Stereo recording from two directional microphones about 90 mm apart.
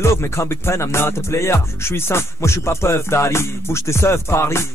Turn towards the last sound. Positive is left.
turn(degrees=30)  # may be behind; listen again after turning